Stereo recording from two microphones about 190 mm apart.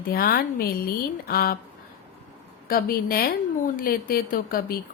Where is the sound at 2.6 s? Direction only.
50° left (ahead or behind).